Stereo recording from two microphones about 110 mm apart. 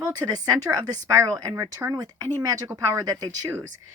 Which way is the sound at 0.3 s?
35° right (ahead or behind).